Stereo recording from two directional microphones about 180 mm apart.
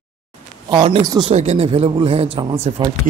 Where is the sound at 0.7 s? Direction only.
30° right (ahead or behind).